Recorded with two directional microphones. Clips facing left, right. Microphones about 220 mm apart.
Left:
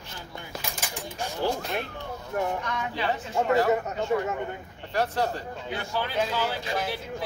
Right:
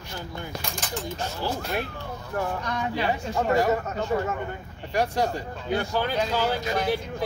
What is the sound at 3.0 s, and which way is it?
Speech, 10° right (ahead or behind).